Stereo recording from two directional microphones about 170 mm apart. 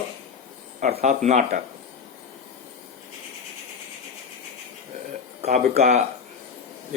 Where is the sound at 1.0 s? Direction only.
40° right (ahead or behind).